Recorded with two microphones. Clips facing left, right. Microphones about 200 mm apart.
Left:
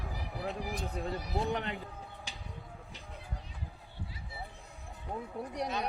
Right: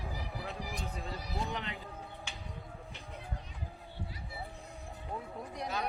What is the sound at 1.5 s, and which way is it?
Speech, 50° left (ahead or behind).